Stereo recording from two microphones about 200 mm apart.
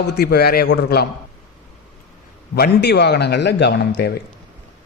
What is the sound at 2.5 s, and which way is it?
A man's voice, 55° left (ahead or behind).